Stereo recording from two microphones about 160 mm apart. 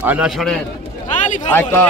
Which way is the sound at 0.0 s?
10° right (ahead or behind).